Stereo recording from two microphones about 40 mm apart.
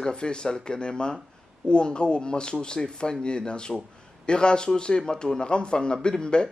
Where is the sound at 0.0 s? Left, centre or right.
Left.